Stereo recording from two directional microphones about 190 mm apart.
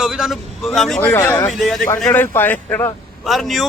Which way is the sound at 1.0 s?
15° left (ahead or behind).